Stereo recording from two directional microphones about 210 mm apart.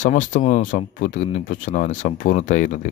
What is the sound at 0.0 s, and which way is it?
Speech, 35° left (ahead or behind).